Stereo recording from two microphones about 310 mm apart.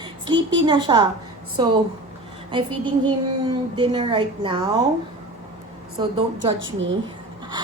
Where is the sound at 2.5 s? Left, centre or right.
Centre.